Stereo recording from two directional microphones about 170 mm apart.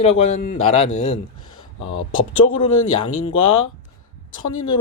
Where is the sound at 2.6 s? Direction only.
30° left (ahead or behind).